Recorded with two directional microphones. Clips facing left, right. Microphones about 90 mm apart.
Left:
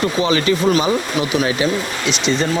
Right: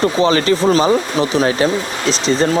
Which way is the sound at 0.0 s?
35° right (ahead or behind).